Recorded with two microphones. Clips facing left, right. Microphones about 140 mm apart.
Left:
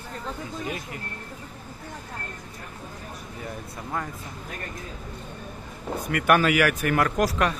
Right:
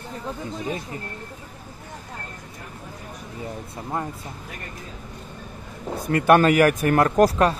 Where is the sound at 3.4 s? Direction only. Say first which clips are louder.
Right 3 dB; 25° right (ahead or behind).